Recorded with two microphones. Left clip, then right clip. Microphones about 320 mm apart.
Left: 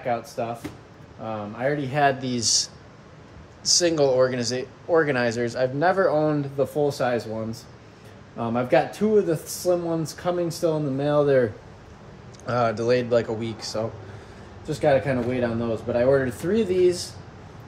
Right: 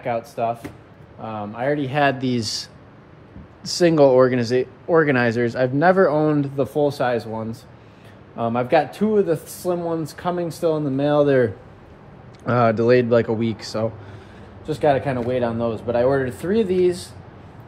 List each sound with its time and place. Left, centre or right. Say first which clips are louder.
0.0 s speech: right 3 dB; right
1.6 s speech: right 2 dB; centre
8.4 s speech: right 3 dB; centre
12.4 s speech: right 5 dB; right
14.7 s speech: right 2 dB; centre